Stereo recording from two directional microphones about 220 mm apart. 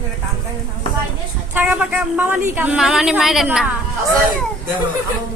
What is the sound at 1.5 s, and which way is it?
A woman's voice, 5° right (ahead or behind).